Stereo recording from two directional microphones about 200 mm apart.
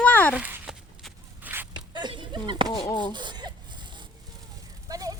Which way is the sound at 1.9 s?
25° right (ahead or behind).